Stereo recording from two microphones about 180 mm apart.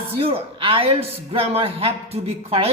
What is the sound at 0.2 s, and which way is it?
A man's voice, 30° right (ahead or behind).